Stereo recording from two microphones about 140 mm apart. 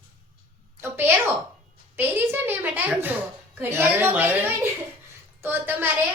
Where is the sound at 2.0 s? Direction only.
15° right (ahead or behind).